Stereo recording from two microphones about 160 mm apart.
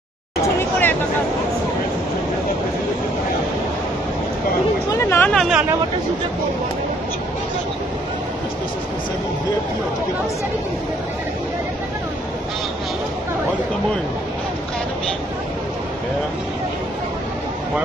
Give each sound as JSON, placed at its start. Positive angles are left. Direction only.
{"t": 0.6, "sound": "hubbub", "side_deg": 10}
{"t": 4.9, "sound": "chatter", "side_deg": 15}
{"t": 5.3, "sound": "speech", "side_deg": 0}